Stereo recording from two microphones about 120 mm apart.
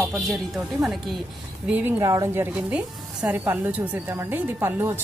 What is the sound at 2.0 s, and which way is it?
A woman's voice, 25° right (ahead or behind).